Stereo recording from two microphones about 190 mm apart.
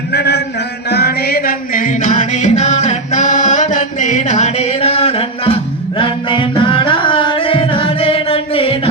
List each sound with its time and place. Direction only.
0.1 s chant: 60° left (ahead or behind)
0.9 s music: 55° left (ahead or behind); by 8.9 s 30° left (ahead or behind)